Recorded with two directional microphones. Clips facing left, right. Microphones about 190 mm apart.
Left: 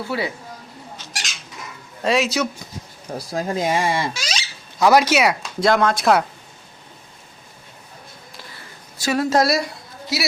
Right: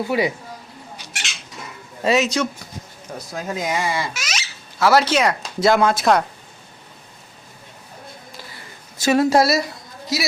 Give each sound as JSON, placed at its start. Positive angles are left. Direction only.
{"t": 0.0, "sound": "speech", "side_deg": -15}
{"t": 2.0, "sound": "speech", "side_deg": 0}
{"t": 3.2, "sound": "speech", "side_deg": 35}
{"t": 4.8, "sound": "speech", "side_deg": 15}
{"t": 5.5, "sound": "speech", "side_deg": -5}
{"t": 9.0, "sound": "a sound", "side_deg": -25}
{"t": 9.3, "sound": "speech", "side_deg": -5}